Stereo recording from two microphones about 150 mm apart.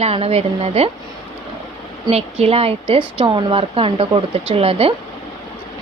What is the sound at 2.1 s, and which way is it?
Speech, 40° right (ahead or behind).